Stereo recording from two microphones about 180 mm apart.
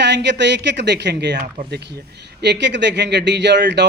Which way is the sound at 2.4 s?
75° right (ahead or behind).